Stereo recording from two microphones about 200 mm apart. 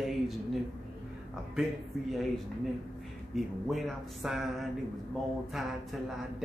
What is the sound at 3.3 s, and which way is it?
Speech, centre (ahead or behind).